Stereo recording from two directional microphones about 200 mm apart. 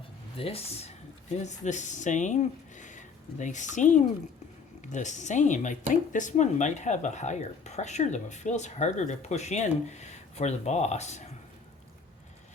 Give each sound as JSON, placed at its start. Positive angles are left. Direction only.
{"t": 0.3, "sound": "speech", "side_deg": 30}